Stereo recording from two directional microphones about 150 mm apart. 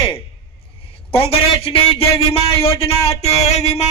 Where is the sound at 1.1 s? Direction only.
40° left (ahead or behind).